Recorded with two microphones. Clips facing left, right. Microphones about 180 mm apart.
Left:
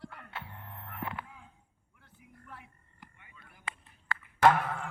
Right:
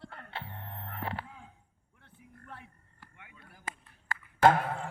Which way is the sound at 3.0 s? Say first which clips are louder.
Left 2 dB; 15° left (ahead or behind).